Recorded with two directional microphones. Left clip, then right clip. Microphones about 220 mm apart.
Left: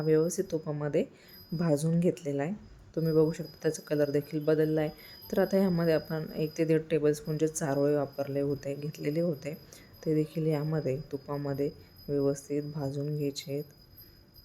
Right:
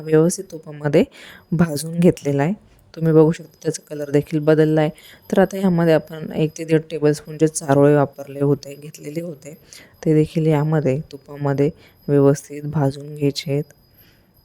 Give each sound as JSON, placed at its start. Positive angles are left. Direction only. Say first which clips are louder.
{"t": 0.0, "sound": "a woman's voice", "louder": "right 10 dB", "side_deg": -40}
{"t": 0.5, "sound": "speech", "louder": "left 1 dB", "side_deg": 5}
{"t": 0.9, "sound": "a woman's voice", "louder": "right 16 dB", "side_deg": -45}
{"t": 3.8, "sound": "speech", "louder": "even", "side_deg": 0}
{"t": 4.1, "sound": "a woman's voice", "louder": "right 12 dB", "side_deg": -40}
{"t": 9.2, "sound": "speech", "louder": "even", "side_deg": 0}
{"t": 9.6, "sound": "a woman's voice", "louder": "right 13 dB", "side_deg": -40}